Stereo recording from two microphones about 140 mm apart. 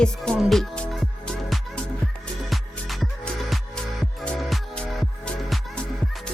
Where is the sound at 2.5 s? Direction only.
Centre (ahead or behind).